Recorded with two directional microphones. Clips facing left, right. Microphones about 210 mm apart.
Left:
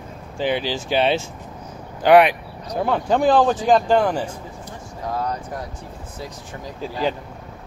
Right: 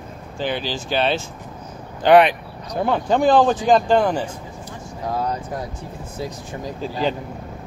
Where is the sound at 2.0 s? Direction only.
10° left (ahead or behind).